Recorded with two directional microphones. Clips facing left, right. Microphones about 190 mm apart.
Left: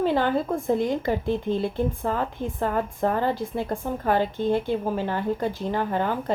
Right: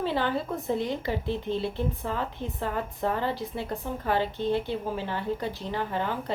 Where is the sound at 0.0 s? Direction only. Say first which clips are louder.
Left 5 dB; 50° left (ahead or behind).